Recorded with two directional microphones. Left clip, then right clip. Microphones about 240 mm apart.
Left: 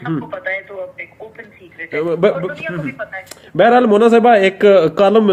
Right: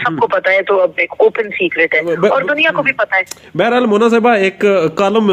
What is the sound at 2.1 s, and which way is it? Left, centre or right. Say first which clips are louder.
Speech: right 1 dB; centre.